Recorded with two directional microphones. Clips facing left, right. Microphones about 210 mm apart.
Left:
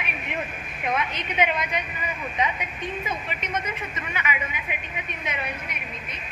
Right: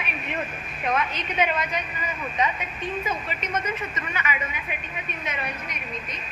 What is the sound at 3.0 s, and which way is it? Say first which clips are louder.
Speech: right 1 dB; 10° left (ahead or behind).